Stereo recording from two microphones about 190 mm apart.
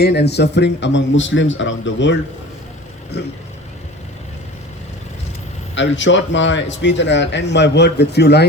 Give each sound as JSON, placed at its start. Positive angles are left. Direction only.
{"t": 0.0, "sound": "speech", "side_deg": 60}
{"t": 5.7, "sound": "speech", "side_deg": 75}